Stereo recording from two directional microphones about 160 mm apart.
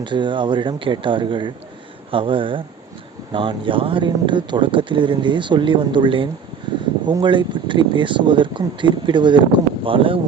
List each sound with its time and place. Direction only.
0.0 s speech: 30° right (ahead or behind)